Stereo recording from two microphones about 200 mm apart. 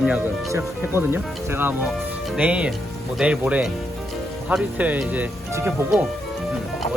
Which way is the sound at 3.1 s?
5° right (ahead or behind).